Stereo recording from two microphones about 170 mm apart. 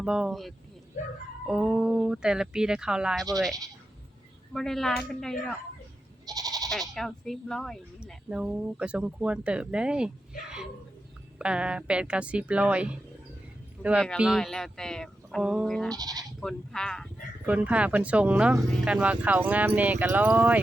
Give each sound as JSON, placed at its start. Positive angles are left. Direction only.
{"t": 0.0, "sound": "speech", "side_deg": -5}
{"t": 4.5, "sound": "speech", "side_deg": 0}
{"t": 6.2, "sound": "goat", "side_deg": -20}
{"t": 6.7, "sound": "speech", "side_deg": 0}
{"t": 11.3, "sound": "speech", "side_deg": -5}
{"t": 15.9, "sound": "speech", "side_deg": -20}
{"t": 16.4, "sound": "speech", "side_deg": 5}
{"t": 17.4, "sound": "speech", "side_deg": -10}